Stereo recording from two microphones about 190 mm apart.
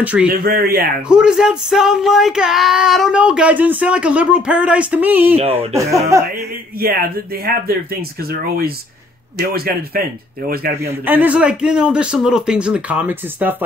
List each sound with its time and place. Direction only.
0.0 s speech: 10° right (ahead or behind)
0.3 s speech: 50° right (ahead or behind)
1.0 s child singing: 5° right (ahead or behind)
5.4 s speech: 35° right (ahead or behind)
6.1 s speech: 15° right (ahead or behind)
6.8 s speech: 50° right (ahead or behind)
10.8 s child singing: 10° right (ahead or behind)